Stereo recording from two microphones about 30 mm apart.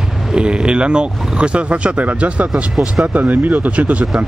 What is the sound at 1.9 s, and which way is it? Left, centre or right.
Speech, right.